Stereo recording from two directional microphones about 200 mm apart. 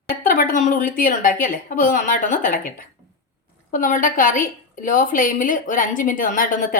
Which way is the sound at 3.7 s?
40° left (ahead or behind).